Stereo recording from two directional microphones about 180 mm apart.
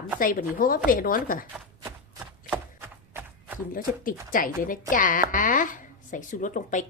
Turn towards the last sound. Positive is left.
turn(degrees=45)  # may be behind; listen again after turning